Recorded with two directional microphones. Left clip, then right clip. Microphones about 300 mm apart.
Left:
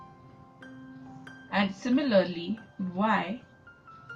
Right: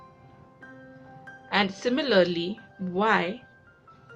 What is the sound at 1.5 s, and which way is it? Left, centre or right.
A woman's voice, right.